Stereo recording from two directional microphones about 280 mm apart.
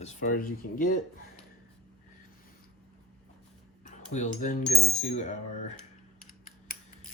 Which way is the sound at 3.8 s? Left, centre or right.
Left.